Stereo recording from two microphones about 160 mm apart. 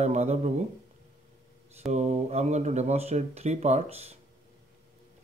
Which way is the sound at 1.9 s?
45° right (ahead or behind).